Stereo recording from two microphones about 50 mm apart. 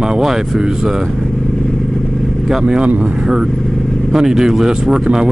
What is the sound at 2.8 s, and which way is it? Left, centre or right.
Speech, right.